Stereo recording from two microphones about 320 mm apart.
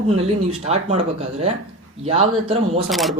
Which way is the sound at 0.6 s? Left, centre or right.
Centre.